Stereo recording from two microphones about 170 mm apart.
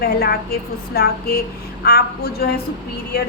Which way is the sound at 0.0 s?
65° left (ahead or behind).